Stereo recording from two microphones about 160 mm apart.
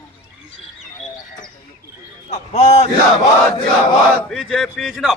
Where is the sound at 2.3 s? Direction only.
45° left (ahead or behind).